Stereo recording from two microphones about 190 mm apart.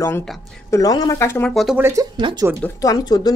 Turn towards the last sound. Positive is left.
turn(degrees=20)  # may be behind; listen again after turning